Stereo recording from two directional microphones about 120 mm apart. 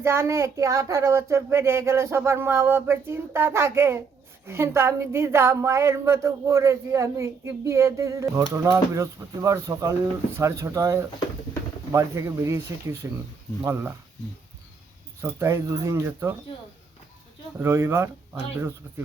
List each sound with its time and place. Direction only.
0.0 s a woman's voice: 20° right (ahead or behind)
15.2 s a woman's voice: 25° right (ahead or behind)
17.6 s a woman's voice: 20° right (ahead or behind)